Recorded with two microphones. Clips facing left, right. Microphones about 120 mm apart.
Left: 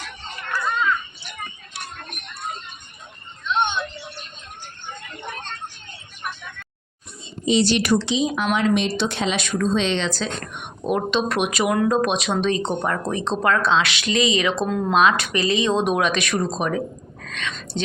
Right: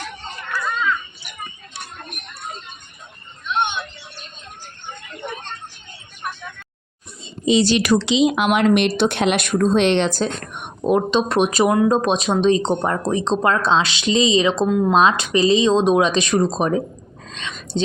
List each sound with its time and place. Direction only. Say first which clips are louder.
0.5 s a sound: even; 15° left (ahead or behind)
3.4 s a sound: even; 15° right (ahead or behind)
7.8 s speech: right 4 dB; 90° right
8.5 s speech: right 4 dB; 65° right (ahead or behind); by 10.7 s 45° right (ahead or behind)
10.8 s speech: right 4 dB; 25° right (ahead or behind)
14.7 s speech: right 5 dB; 10° right (ahead or behind)
14.9 s speech: left 1 dB; 25° right (ahead or behind)
17.2 s a sound: left 2 dB; 30° right (ahead or behind)
17.7 s speech: right 6 dB; 30° right (ahead or behind)